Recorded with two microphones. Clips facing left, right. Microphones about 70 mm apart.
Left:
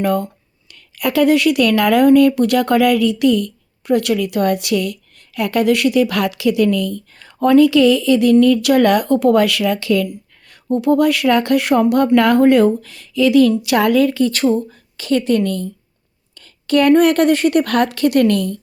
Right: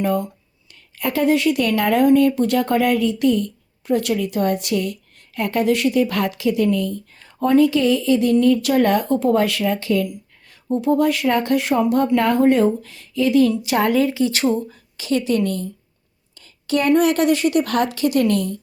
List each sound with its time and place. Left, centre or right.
0.0 s speech: left
0.7 s speech: left
12.1 s speech: left
13.6 s speech: left
14.2 s a woman's voice: left